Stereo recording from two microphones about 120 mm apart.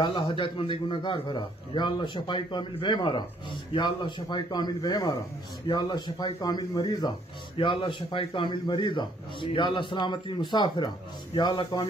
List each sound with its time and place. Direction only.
0.0 s a man's voice: 45° left (ahead or behind)
7.5 s a man's voice: 50° left (ahead or behind)